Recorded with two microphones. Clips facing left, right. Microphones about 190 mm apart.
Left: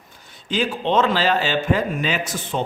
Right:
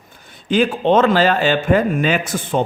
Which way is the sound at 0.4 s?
55° right (ahead or behind).